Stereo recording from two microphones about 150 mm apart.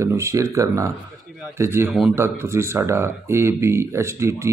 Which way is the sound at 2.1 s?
15° right (ahead or behind).